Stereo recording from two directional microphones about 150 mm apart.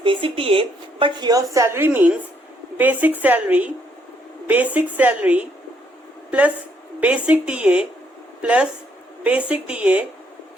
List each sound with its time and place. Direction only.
0.0 s a woman's voice: 35° right (ahead or behind); by 5.5 s 10° right (ahead or behind)
7.0 s a woman's voice: 10° right (ahead or behind)